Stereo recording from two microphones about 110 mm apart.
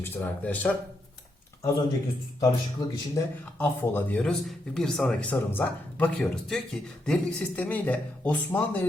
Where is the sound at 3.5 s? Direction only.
20° left (ahead or behind).